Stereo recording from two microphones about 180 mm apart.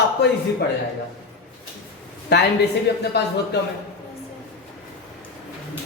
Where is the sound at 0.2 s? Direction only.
70° left (ahead or behind).